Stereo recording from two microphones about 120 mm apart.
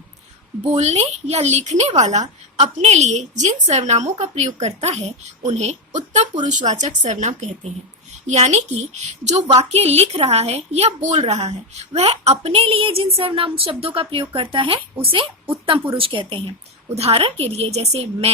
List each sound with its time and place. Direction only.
0.7 s a woman's voice: 65° right (ahead or behind); by 16.4 s 50° right (ahead or behind)
16.9 s a woman's voice: 60° right (ahead or behind)